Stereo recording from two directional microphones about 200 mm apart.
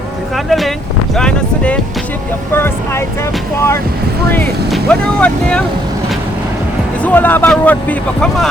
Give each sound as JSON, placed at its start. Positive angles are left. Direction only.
{"t": 0.3, "sound": "a sound", "side_deg": 0}
{"t": 1.1, "sound": "boat", "side_deg": 5}
{"t": 2.6, "sound": "vehicle", "side_deg": 10}
{"t": 4.3, "sound": "speech", "side_deg": 5}
{"t": 7.0, "sound": "speech", "side_deg": 10}